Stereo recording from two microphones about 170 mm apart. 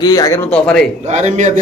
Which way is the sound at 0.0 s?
20° left (ahead or behind).